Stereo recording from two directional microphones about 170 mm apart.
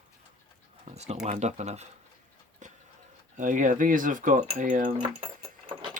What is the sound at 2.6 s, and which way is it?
Music, 45° right (ahead or behind).